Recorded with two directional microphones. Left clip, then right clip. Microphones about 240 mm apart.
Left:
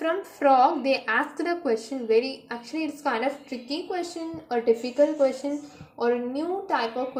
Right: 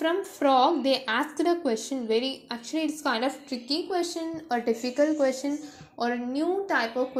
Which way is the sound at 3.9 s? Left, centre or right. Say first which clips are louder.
Right 2 dB; centre.